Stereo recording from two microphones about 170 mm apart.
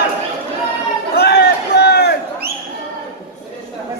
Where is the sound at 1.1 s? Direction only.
75° left (ahead or behind).